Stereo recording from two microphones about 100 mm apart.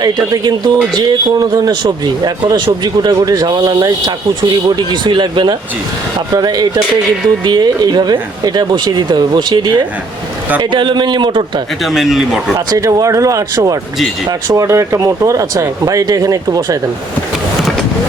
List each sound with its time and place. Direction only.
0.0 s speech: 40° right (ahead or behind)
6.3 s speech: 40° right (ahead or behind)
11.8 s speech: centre (ahead or behind)
12.5 s speech: 35° right (ahead or behind)